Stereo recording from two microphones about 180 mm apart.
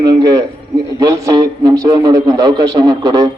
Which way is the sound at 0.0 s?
20° right (ahead or behind).